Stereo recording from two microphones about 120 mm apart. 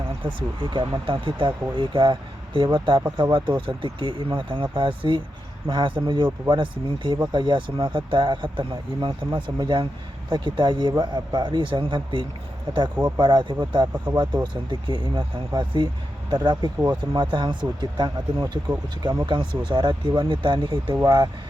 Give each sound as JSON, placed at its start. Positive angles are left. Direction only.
{"t": 0.2, "sound": "speech", "side_deg": -40}